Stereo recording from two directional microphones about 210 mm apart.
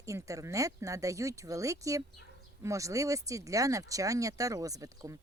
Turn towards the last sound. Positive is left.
turn(degrees=-15)  # may be behind; listen again after turning